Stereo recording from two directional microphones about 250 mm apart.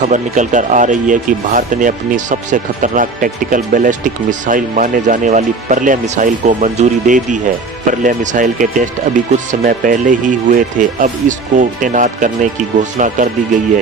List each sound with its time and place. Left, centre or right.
0.0 s speech: right